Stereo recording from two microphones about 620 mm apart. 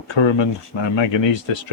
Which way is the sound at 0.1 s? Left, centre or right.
Left.